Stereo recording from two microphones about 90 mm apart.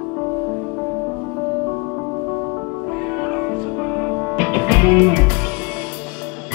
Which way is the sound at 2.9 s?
15° right (ahead or behind).